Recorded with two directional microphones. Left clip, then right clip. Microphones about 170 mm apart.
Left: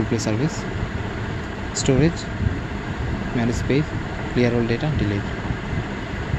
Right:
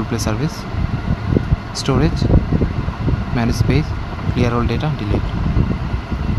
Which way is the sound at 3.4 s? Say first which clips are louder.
Right 2 dB; 20° right (ahead or behind).